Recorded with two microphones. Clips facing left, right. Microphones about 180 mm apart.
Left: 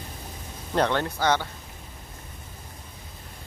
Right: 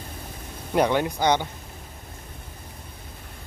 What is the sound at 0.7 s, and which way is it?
Speech, 10° right (ahead or behind).